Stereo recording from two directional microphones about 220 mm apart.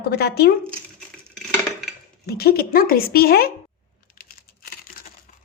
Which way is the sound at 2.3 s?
45° left (ahead or behind).